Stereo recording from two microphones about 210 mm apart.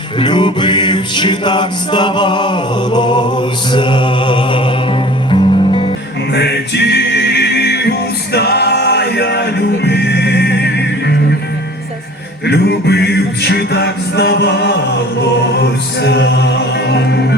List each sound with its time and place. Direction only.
0.2 s music: 20° left (ahead or behind)
6.3 s music: 50° left (ahead or behind)
12.5 s music: 50° left (ahead or behind)